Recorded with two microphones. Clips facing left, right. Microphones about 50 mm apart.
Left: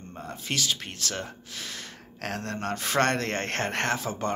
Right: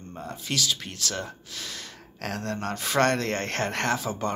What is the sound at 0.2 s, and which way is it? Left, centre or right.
Speech, left.